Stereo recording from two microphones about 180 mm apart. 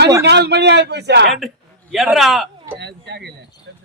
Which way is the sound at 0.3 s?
70° right (ahead or behind).